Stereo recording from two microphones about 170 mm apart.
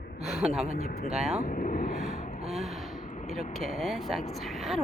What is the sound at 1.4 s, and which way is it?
Vehicle, 55° left (ahead or behind).